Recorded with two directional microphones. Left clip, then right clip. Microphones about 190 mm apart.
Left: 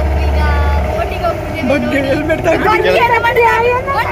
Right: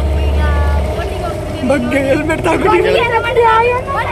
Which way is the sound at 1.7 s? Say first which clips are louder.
Right 1 dB; 5° right (ahead or behind).